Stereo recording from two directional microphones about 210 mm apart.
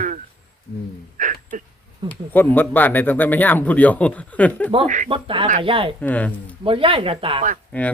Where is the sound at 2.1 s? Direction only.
10° left (ahead or behind).